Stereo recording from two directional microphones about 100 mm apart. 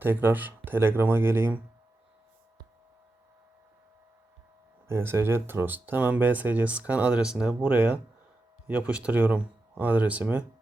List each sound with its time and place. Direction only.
0.0 s speech: 20° right (ahead or behind)
4.9 s speech: 25° right (ahead or behind)